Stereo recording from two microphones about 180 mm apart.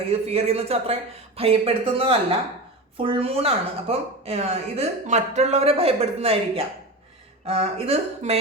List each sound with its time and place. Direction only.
0.3 s a woman's voice: 35° right (ahead or behind)